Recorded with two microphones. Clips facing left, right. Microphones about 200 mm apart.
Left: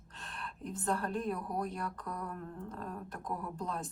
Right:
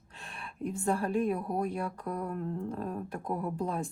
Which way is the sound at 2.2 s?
30° right (ahead or behind).